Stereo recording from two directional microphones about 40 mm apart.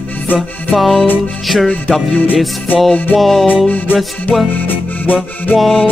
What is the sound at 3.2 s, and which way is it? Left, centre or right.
Music, centre.